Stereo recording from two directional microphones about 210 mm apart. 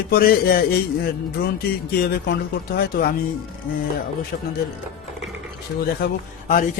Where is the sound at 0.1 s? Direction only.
45° left (ahead or behind).